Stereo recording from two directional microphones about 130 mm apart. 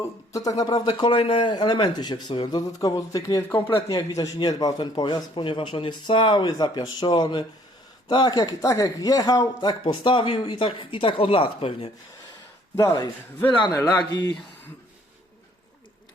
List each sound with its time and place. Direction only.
0.0 s speech: 25° left (ahead or behind)
3.7 s speech: 45° left (ahead or behind)
4.1 s speech: 30° left (ahead or behind)
12.7 s speech: 25° left (ahead or behind)
13.5 s speech: 35° left (ahead or behind)